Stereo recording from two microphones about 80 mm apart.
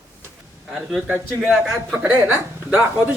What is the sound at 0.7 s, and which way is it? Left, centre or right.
A man's voice, centre.